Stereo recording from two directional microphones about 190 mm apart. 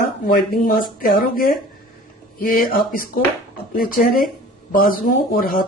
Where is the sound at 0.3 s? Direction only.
50° left (ahead or behind).